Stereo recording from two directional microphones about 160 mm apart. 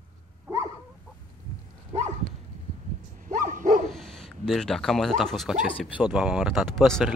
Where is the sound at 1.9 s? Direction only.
40° right (ahead or behind).